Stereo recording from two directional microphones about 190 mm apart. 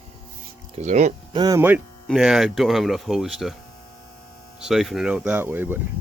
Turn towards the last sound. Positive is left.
turn(degrees=-10)  # may be behind; listen again after turning